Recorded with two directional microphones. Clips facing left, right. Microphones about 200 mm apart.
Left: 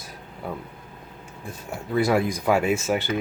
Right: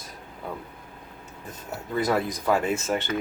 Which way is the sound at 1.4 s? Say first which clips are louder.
Left 3 dB; 10° left (ahead or behind).